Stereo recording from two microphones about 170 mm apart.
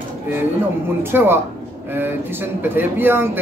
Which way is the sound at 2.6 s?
10° right (ahead or behind).